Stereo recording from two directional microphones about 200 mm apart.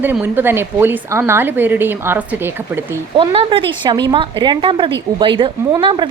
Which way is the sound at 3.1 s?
25° right (ahead or behind).